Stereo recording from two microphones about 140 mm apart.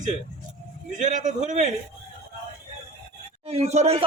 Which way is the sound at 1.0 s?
65° right (ahead or behind).